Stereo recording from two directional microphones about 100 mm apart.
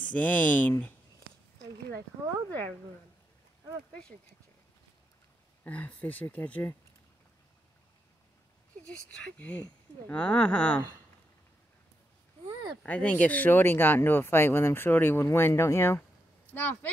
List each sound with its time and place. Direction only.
0.1 s speech: 15° left (ahead or behind)
5.6 s speech: 15° left (ahead or behind)
8.8 s speech: 10° left (ahead or behind)
12.8 s speech: 15° left (ahead or behind)